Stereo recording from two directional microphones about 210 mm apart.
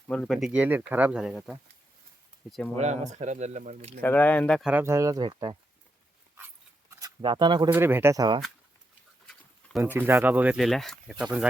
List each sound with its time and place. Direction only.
0.1 s speech: centre (ahead or behind)
2.7 s speech: 35° right (ahead or behind)
4.0 s speech: 10° left (ahead or behind)
4.7 s speech: 10° right (ahead or behind)
6.9 s speech: 20° right (ahead or behind)
7.7 s speech: 10° right (ahead or behind)
9.7 s speech: 10° right (ahead or behind)